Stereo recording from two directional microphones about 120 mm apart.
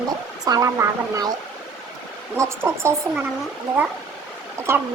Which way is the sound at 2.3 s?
25° right (ahead or behind).